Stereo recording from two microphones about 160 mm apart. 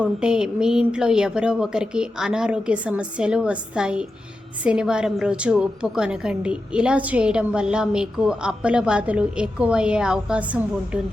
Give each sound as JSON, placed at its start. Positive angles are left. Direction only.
{"t": 0.0, "sound": "a woman's voice", "side_deg": -5}